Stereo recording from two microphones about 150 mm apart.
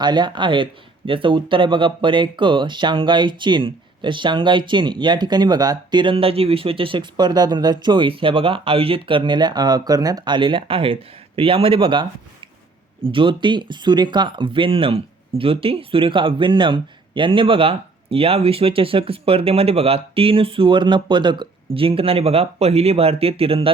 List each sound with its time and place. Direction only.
0.0 s speech: 30° right (ahead or behind)
13.1 s speech: 35° right (ahead or behind)